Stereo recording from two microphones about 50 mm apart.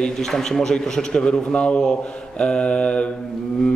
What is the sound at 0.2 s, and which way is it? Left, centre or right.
A man's voice, centre.